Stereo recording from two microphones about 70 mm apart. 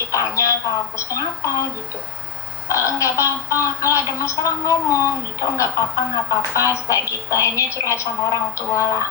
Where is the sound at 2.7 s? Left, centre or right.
Left.